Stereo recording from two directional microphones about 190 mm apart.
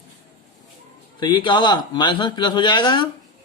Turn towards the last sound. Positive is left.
turn(degrees=25)  # may be behind; listen again after turning